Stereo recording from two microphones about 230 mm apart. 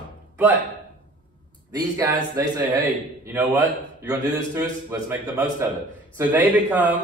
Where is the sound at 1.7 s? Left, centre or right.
Centre.